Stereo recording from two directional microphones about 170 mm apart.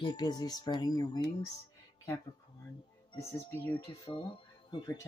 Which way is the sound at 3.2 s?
15° left (ahead or behind).